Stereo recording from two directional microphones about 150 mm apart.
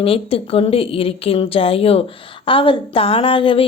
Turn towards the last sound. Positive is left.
turn(degrees=35)  # may be behind; listen again after turning